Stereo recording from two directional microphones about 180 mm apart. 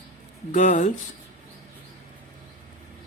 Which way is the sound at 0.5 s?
45° left (ahead or behind).